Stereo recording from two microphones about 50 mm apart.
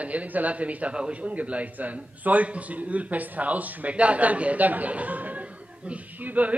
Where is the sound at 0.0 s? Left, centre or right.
Right.